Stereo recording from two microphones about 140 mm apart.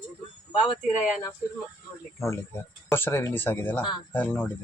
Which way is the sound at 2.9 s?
15° left (ahead or behind).